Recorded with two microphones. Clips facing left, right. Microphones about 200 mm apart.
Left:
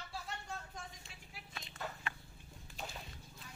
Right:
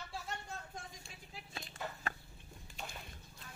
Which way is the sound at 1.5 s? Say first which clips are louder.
Right 1 dB; 30° right (ahead or behind).